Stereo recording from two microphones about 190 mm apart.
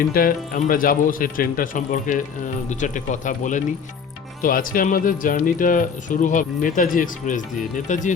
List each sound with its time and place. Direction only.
0.1 s speech: 50° left (ahead or behind)